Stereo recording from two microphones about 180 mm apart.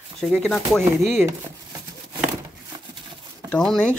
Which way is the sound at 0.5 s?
Centre (ahead or behind).